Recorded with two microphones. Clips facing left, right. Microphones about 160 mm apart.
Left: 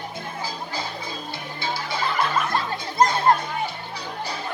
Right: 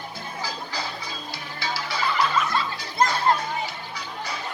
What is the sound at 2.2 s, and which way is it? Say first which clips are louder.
Music: even; 50° left (ahead or behind).